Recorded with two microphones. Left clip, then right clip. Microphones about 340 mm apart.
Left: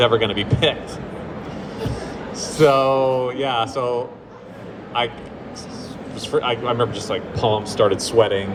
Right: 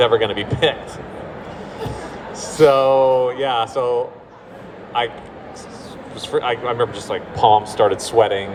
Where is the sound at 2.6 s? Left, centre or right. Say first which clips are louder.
Right 3 dB; right.